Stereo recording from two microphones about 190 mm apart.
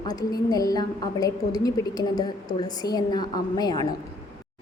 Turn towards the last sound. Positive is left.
turn(degrees=20)  # may be behind; listen again after turning